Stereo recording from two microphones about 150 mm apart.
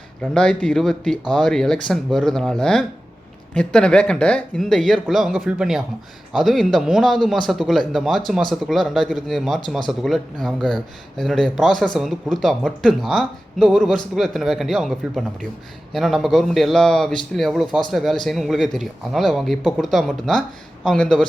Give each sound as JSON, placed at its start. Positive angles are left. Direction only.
{"t": 0.2, "sound": "speech", "side_deg": 5}